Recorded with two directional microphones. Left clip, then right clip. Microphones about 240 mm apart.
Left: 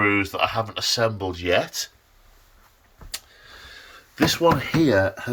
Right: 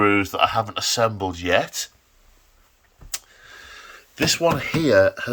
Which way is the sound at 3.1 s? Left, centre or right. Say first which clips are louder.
Right 2 dB; centre.